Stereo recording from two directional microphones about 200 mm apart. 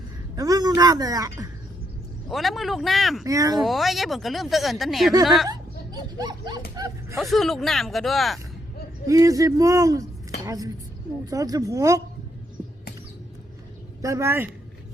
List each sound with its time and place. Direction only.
0.3 s a woman's voice: 20° right (ahead or behind)
2.3 s speech: centre (ahead or behind)
3.2 s speech: 15° right (ahead or behind)
3.6 s speech: centre (ahead or behind)
5.5 s a sound: 20° right (ahead or behind)
6.7 s speech: 15° right (ahead or behind)
7.2 s speech: centre (ahead or behind)
9.0 s speech: 15° right (ahead or behind)
14.0 s speech: 15° right (ahead or behind)